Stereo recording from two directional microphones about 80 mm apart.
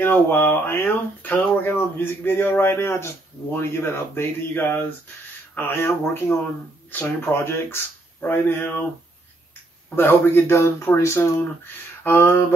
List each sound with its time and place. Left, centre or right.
0.0 s speech: left
9.8 s speech: left
12.0 s a sound: left